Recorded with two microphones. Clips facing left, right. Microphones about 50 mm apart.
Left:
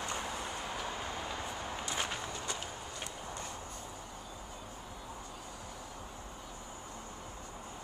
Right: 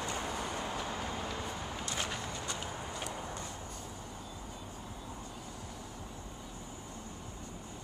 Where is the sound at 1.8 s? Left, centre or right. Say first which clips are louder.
Left 1 dB; centre.